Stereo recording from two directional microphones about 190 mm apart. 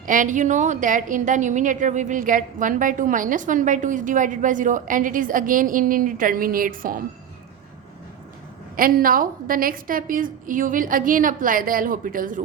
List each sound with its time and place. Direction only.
0.0 s a woman's voice: 45° right (ahead or behind)
8.7 s a woman's voice: 50° right (ahead or behind)